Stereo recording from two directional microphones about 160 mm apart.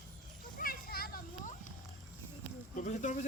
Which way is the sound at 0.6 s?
70° left (ahead or behind).